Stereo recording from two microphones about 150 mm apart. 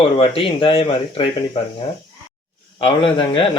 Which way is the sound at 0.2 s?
35° left (ahead or behind).